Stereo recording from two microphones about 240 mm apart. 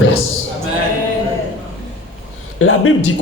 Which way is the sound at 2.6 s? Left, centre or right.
Left.